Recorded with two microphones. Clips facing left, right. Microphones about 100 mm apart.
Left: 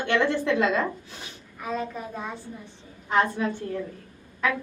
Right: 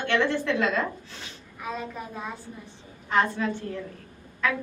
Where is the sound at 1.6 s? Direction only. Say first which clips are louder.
Left 3 dB; centre (ahead or behind).